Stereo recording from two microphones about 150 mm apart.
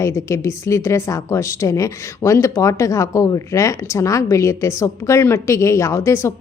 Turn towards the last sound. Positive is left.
turn(degrees=20)  # may be behind; listen again after turning